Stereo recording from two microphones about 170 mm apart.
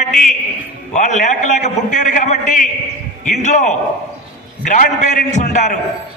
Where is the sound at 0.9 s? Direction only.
50° left (ahead or behind).